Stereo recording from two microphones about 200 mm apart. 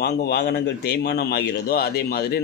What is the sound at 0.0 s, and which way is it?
A man's voice, 55° left (ahead or behind).